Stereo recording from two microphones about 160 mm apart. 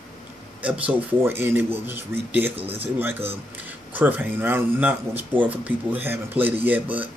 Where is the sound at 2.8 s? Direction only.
10° right (ahead or behind).